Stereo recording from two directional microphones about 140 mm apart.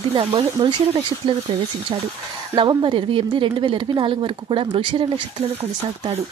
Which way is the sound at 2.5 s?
35° right (ahead or behind).